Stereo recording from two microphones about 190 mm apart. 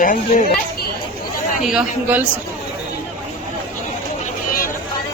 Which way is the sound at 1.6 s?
5° right (ahead or behind).